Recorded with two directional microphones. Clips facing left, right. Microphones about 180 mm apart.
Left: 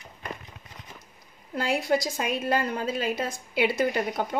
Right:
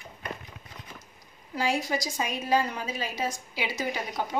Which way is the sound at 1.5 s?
60° left (ahead or behind).